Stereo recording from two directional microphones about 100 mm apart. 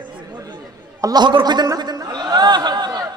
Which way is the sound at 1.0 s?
45° right (ahead or behind).